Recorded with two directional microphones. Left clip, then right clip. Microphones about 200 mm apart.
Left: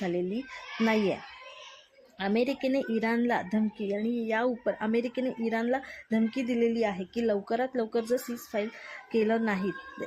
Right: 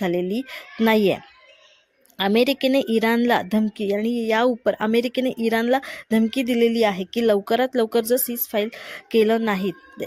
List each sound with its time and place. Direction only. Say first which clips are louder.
0.0 s a woman's voice: right 8 dB; 40° right (ahead or behind)